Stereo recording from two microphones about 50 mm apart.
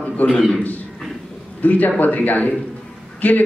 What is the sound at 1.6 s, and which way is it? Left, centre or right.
Speech, left.